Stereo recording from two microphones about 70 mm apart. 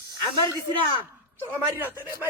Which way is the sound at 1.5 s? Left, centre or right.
Right.